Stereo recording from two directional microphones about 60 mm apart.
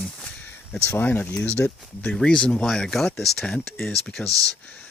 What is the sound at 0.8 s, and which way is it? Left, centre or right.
Speech, left.